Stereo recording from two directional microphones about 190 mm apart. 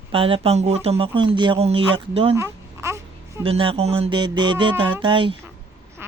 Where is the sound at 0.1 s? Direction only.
30° right (ahead or behind).